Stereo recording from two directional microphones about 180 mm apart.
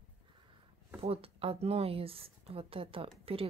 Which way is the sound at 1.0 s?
30° right (ahead or behind).